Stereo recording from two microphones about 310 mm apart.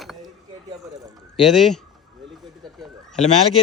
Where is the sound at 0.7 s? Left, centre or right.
Centre.